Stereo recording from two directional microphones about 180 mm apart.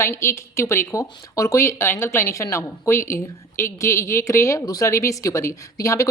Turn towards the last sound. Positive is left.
turn(degrees=20)  # may be behind; listen again after turning